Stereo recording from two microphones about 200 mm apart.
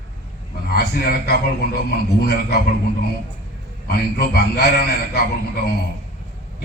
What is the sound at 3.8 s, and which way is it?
A man's voice, 50° left (ahead or behind).